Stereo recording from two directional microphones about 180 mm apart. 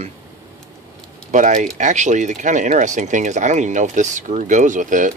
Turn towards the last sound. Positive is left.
turn(degrees=-45)  # may be behind; listen again after turning